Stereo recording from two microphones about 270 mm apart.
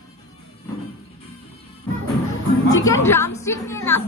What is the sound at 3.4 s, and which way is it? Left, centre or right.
Music, centre.